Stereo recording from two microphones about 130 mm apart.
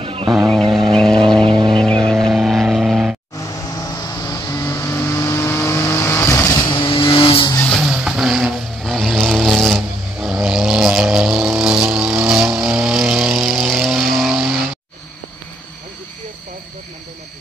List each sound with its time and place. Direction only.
0.0 s vehicle: 45° right (ahead or behind)
0.3 s vehicle: centre (ahead or behind)
1.4 s vehicle: 40° right (ahead or behind)
1.8 s vehicle: 5° left (ahead or behind)
3.8 s vehicle: 25° left (ahead or behind)
6.7 s vehicle: 40° left (ahead or behind)
7.7 s vehicle: 5° right (ahead or behind)